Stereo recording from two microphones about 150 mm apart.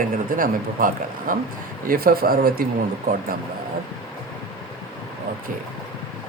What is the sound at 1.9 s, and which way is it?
Speech, 90° right.